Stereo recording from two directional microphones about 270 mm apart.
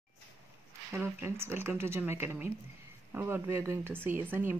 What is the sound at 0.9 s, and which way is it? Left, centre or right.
Speech, centre.